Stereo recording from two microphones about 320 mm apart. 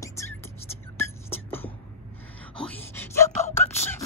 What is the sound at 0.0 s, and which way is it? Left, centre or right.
Whispering, centre.